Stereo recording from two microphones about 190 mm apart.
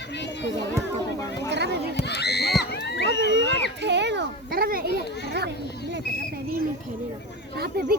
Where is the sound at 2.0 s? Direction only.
60° left (ahead or behind).